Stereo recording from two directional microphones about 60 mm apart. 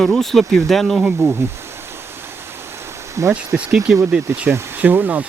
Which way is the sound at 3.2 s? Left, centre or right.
Right.